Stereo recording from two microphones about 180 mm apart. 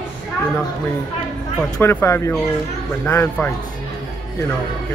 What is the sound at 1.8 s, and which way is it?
Speech, 15° left (ahead or behind).